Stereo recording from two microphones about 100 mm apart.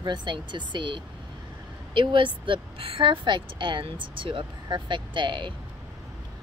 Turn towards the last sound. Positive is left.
turn(degrees=-55)  # may be behind; listen again after turning